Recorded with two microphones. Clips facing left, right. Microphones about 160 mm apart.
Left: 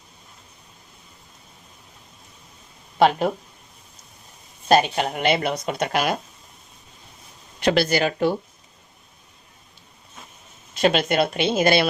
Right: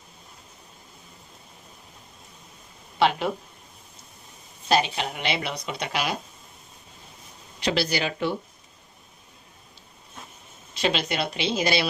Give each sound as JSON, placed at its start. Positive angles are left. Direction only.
{"t": 3.0, "sound": "speech", "side_deg": 45}
{"t": 4.7, "sound": "speech", "side_deg": 50}
{"t": 7.6, "sound": "speech", "side_deg": 55}
{"t": 10.8, "sound": "speech", "side_deg": 50}